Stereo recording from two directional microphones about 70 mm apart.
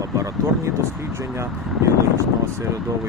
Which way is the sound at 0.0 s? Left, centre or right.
Right.